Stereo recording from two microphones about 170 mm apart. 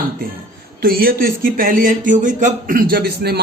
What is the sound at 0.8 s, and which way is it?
Speech, 60° right (ahead or behind).